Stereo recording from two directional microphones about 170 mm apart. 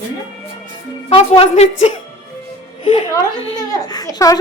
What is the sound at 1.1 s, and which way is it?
Speech, 35° left (ahead or behind).